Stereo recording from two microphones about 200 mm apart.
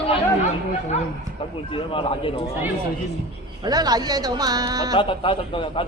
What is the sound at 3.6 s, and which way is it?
Speech, 20° right (ahead or behind).